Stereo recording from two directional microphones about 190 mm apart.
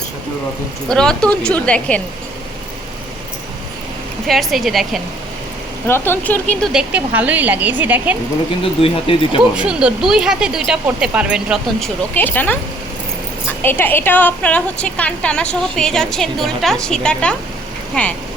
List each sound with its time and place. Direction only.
0.9 s a woman's voice: 5° left (ahead or behind)
4.3 s a woman's voice: centre (ahead or behind)
5.9 s speech: 10° left (ahead or behind)
6.7 s speech: 5° right (ahead or behind)
8.8 s speech: 30° left (ahead or behind)
9.6 s a woman's voice: 5° right (ahead or behind)
12.1 s speech: 10° left (ahead or behind)
13.6 s a woman's voice: 10° left (ahead or behind)